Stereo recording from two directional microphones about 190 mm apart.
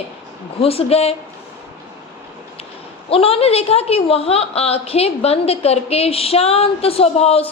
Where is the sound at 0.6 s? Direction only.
30° left (ahead or behind).